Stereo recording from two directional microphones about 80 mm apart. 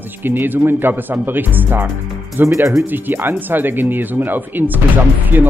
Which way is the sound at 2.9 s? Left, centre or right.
Right.